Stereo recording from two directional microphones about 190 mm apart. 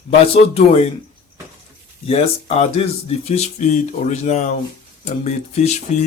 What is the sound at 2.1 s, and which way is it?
Speech, 35° left (ahead or behind).